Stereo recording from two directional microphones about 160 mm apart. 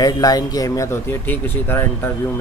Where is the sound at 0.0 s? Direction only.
25° left (ahead or behind).